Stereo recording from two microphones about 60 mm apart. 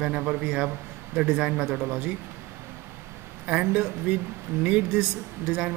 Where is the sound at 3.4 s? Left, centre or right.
Right.